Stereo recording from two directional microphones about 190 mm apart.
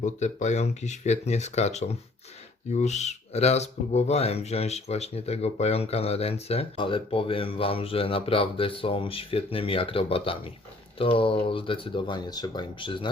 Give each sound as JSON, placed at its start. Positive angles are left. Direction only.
{"t": 0.0, "sound": "speech", "side_deg": 40}